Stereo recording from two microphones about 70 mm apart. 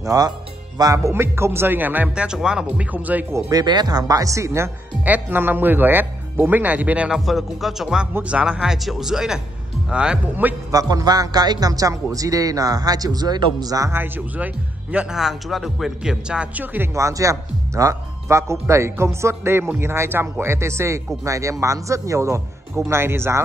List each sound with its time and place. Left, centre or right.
0.0 s speech: right
0.9 s speech: right
2.1 s speech: centre
2.9 s speech: right
3.5 s speech: right
5.0 s speech: right
7.1 s speech: centre
10.7 s speech: right
13.9 s speech: right
15.1 s speech: centre
16.6 s speech: right
16.9 s speech: right